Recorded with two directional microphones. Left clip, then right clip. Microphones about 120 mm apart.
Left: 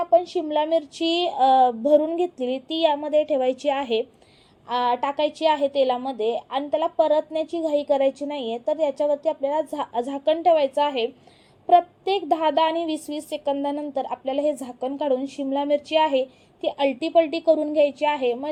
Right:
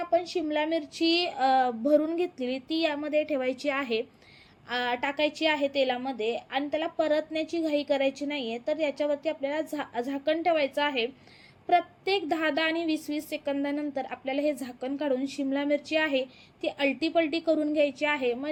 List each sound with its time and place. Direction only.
0.0 s a woman's voice: 45° left (ahead or behind)